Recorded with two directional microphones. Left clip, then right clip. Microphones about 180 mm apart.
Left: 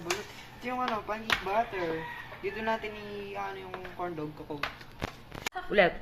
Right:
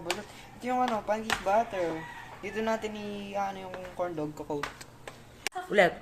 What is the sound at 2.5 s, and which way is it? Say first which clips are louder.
Speech: right 3 dB; 70° right (ahead or behind).